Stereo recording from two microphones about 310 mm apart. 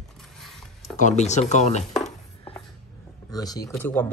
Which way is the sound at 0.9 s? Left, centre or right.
Left.